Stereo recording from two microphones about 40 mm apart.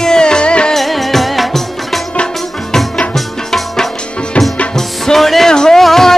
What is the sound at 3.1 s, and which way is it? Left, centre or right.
Tabla, centre.